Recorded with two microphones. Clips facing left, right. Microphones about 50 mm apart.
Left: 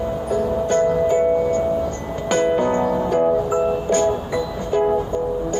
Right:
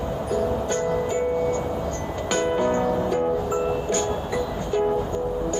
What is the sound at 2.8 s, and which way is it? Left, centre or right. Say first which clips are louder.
Music: left 4 dB; centre.